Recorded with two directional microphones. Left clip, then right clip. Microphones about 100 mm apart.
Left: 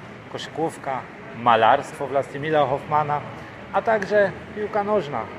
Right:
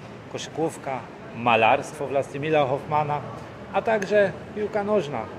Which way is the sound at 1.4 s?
15° right (ahead or behind).